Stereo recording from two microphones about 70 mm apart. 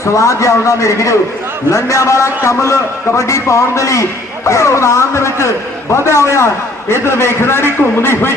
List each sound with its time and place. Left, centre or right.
0.0 s a man's voice: left